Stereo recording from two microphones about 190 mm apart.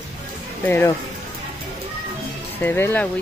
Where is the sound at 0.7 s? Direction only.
10° left (ahead or behind).